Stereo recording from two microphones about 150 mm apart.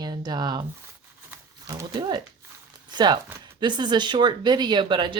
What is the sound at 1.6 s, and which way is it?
Speech, 25° right (ahead or behind).